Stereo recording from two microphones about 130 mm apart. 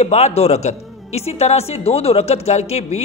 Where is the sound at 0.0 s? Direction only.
55° left (ahead or behind).